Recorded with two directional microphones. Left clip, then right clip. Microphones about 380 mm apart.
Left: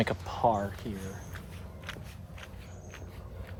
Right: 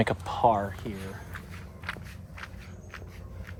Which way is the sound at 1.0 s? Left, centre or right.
Centre.